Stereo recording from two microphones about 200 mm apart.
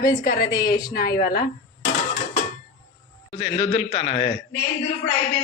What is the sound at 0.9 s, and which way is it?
Speech, 50° left (ahead or behind).